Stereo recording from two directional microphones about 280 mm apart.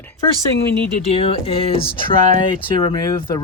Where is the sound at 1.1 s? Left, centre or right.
Left.